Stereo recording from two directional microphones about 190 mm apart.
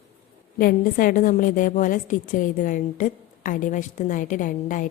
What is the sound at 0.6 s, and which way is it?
A woman's voice, 50° left (ahead or behind).